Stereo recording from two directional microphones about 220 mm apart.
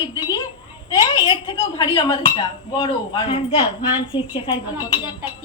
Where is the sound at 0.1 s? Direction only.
20° left (ahead or behind).